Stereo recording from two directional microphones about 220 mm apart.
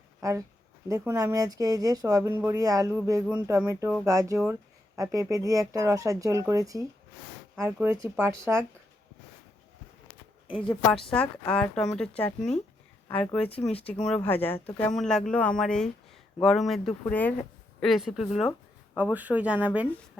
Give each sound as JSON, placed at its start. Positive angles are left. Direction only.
{"t": 0.2, "sound": "speech", "side_deg": -15}
{"t": 10.5, "sound": "a woman's voice", "side_deg": 0}